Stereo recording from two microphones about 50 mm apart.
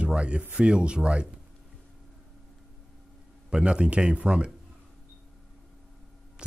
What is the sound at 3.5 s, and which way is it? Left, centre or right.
Speech, centre.